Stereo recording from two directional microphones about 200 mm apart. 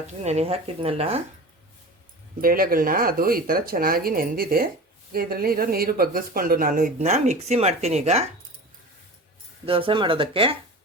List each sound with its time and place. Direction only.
0.1 s speech: 35° right (ahead or behind)
2.4 s speech: 45° right (ahead or behind)
9.6 s speech: 25° right (ahead or behind)